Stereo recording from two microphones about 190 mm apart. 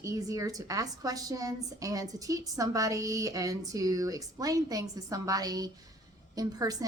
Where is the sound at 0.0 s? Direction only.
20° right (ahead or behind).